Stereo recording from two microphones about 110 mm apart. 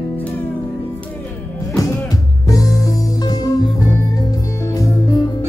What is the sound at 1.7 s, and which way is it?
Music, 30° left (ahead or behind).